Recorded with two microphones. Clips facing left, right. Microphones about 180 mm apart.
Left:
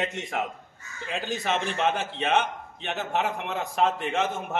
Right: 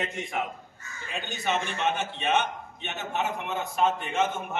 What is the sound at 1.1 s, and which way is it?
A man's voice, 90° left.